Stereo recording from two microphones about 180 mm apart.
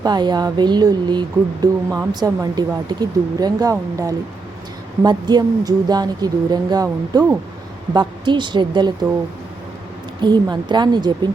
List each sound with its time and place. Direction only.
0.0 s speech: 25° right (ahead or behind)
10.2 s speech: 25° right (ahead or behind)